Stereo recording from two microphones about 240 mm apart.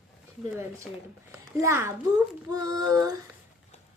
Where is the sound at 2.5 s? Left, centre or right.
Centre.